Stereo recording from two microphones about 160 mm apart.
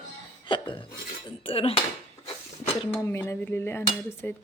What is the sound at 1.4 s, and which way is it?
Speech, 35° left (ahead or behind).